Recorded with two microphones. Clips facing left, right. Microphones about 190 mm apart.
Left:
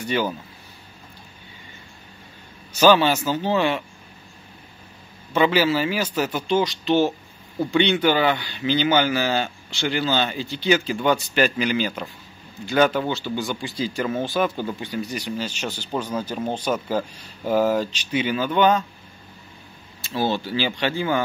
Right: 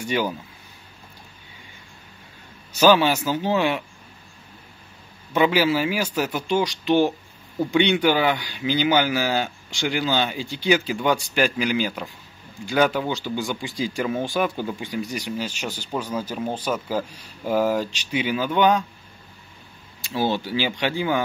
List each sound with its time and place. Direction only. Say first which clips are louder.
0.0 s speech: even; 10° right (ahead or behind)
2.8 s speech: left 1 dB; 10° right (ahead or behind)
5.3 s speech: even; 10° right (ahead or behind)
20.0 s speech: even; 15° right (ahead or behind)